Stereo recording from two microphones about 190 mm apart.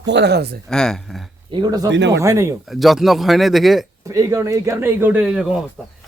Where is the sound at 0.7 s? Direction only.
5° left (ahead or behind).